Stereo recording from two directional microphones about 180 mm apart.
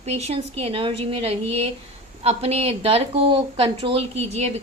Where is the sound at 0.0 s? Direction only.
35° right (ahead or behind).